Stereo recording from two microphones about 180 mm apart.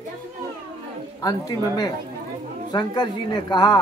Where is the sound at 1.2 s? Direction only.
20° left (ahead or behind).